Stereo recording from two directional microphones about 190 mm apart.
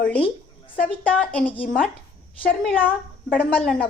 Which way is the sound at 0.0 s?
5° left (ahead or behind).